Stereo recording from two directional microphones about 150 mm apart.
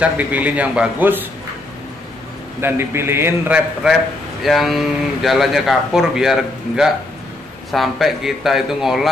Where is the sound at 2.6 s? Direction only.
15° right (ahead or behind).